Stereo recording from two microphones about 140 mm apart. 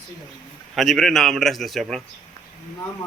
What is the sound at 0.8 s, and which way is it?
A man's voice, centre (ahead or behind).